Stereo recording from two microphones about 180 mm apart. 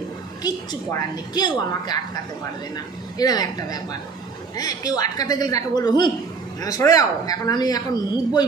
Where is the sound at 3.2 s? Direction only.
20° left (ahead or behind).